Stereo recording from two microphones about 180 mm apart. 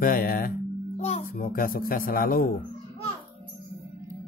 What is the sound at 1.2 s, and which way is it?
Speech, 55° left (ahead or behind).